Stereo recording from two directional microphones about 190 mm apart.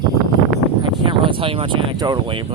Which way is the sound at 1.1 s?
25° right (ahead or behind).